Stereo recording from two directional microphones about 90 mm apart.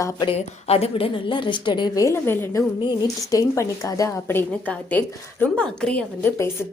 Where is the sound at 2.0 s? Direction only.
35° left (ahead or behind).